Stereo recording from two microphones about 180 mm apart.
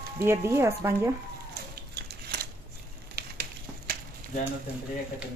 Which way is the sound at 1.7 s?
60° right (ahead or behind).